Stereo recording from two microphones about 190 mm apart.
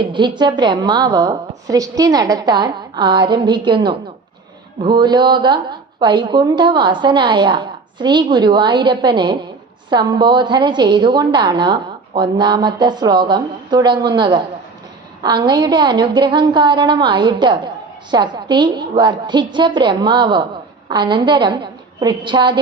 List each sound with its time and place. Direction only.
0.1 s a woman's voice: 25° right (ahead or behind)